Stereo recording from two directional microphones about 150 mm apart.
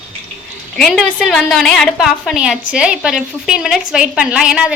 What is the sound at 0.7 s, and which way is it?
A woman's voice, 5° left (ahead or behind).